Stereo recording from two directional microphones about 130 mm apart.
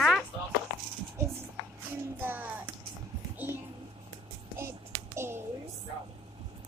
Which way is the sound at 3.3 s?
15° right (ahead or behind).